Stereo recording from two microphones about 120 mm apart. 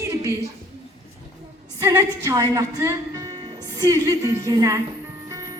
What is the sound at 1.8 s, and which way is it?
Speech, 25° right (ahead or behind).